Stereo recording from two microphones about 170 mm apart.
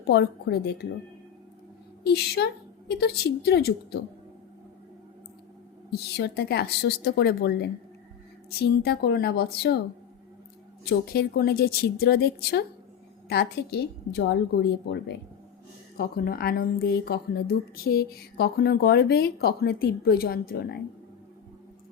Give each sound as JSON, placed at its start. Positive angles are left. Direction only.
{"t": 0.0, "sound": "a woman's voice", "side_deg": 80}
{"t": 2.0, "sound": "a woman's voice", "side_deg": 70}
{"t": 5.9, "sound": "a woman's voice", "side_deg": 70}
{"t": 10.8, "sound": "a woman's voice", "side_deg": 65}
{"t": 16.0, "sound": "speech", "side_deg": 60}